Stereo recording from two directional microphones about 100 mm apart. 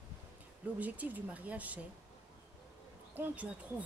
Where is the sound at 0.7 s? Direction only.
15° right (ahead or behind).